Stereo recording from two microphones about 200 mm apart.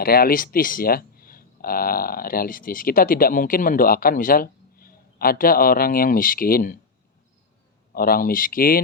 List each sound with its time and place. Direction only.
0.0 s speech: 50° left (ahead or behind)
7.9 s speech: 45° left (ahead or behind)